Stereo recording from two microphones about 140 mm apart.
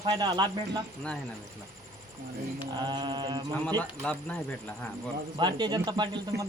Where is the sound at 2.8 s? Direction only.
30° right (ahead or behind).